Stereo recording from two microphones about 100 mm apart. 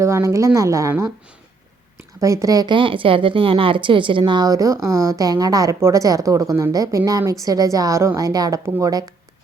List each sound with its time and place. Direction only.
0.0 s a woman's voice: 30° right (ahead or behind)
2.2 s a woman's voice: 35° right (ahead or behind)
2.7 s a woman's voice: 60° right (ahead or behind)
4.3 s a woman's voice: 40° right (ahead or behind)